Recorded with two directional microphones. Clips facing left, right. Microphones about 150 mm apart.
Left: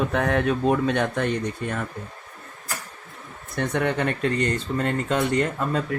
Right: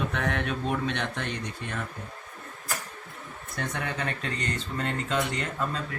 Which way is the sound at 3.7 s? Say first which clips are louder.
Left 10 dB; 60° left (ahead or behind).